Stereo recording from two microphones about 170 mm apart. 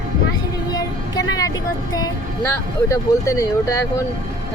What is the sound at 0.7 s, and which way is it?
Vehicle, 20° left (ahead or behind).